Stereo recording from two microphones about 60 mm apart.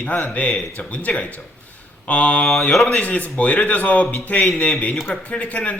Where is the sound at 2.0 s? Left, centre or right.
Left.